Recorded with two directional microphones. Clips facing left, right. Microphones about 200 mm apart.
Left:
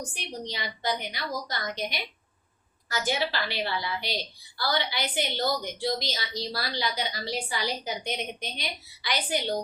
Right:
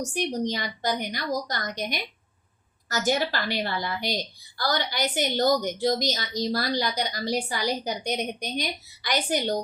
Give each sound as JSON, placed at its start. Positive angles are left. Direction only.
{"t": 0.0, "sound": "a woman's voice", "side_deg": -45}